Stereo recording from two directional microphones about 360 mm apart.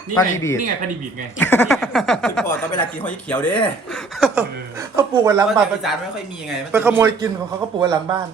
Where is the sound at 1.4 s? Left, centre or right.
Centre.